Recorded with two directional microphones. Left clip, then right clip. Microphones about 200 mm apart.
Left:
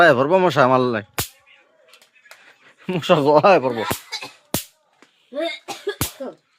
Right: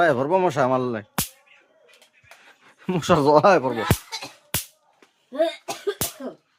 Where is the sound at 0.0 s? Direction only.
15° left (ahead or behind).